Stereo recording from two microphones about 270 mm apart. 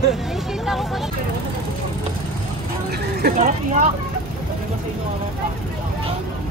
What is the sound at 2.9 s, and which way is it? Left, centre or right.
Speech, right.